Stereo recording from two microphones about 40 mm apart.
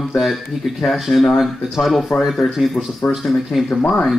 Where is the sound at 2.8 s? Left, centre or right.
Left.